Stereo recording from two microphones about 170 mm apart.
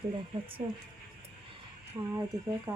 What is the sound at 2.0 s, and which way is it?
Speech, 20° right (ahead or behind).